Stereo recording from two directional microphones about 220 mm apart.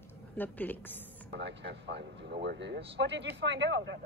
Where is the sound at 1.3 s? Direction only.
50° right (ahead or behind).